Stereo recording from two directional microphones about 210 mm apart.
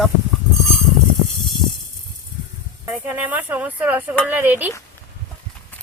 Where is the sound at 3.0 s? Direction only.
10° right (ahead or behind).